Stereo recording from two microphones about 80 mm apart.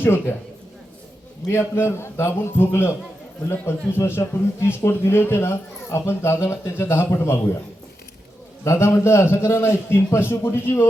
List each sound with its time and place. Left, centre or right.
0.0 s a man's voice: left
1.5 s a man's voice: left
8.6 s a man's voice: left